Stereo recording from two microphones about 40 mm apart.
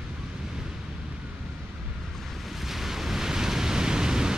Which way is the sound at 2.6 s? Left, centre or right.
Centre.